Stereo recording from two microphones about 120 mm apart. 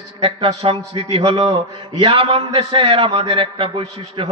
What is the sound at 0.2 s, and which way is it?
A man's voice, 55° right (ahead or behind).